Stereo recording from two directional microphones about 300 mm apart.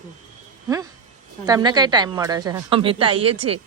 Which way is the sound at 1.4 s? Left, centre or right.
Centre.